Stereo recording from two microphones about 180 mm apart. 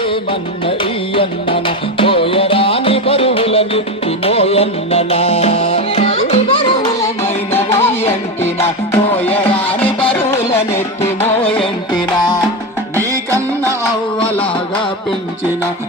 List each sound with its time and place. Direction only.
0.0 s music: 30° left (ahead or behind)
7.8 s music: 35° left (ahead or behind)
8.9 s music: 10° left (ahead or behind)
11.2 s music: 30° left (ahead or behind)
13.0 s music: 15° right (ahead or behind)